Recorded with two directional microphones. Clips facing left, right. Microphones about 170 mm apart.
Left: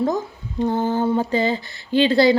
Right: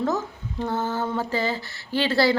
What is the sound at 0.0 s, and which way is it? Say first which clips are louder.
Speech: left 4 dB; 15° left (ahead or behind).